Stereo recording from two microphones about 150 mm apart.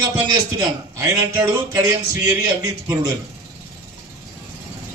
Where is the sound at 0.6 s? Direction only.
25° right (ahead or behind).